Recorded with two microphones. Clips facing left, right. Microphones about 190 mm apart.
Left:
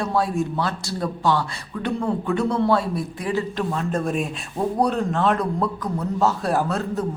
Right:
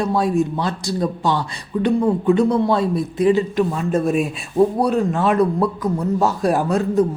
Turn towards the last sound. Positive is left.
turn(degrees=-10)  # may be behind; listen again after turning